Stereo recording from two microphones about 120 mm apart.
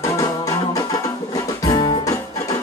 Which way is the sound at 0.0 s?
30° left (ahead or behind).